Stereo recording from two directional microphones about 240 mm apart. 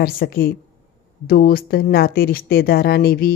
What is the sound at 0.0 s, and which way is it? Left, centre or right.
Speech, left.